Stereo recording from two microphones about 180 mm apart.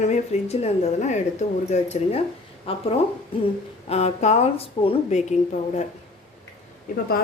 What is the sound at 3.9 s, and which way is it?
A woman's voice, 35° left (ahead or behind).